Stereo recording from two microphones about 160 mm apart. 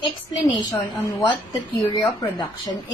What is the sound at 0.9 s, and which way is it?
Speech, 25° left (ahead or behind).